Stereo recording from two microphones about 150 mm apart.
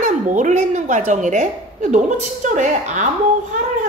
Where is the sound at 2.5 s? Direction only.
55° right (ahead or behind).